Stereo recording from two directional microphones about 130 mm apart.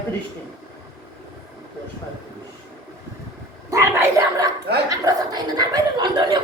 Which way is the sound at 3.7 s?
25° right (ahead or behind).